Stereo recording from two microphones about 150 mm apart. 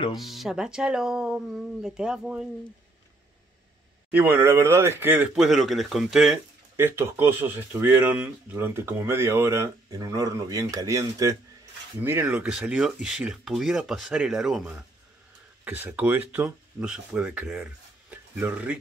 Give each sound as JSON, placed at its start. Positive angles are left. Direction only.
{"t": 0.1, "sound": "speech", "side_deg": 0}
{"t": 4.1, "sound": "speech", "side_deg": -15}
{"t": 5.3, "sound": "speech", "side_deg": 0}
{"t": 6.8, "sound": "speech", "side_deg": -15}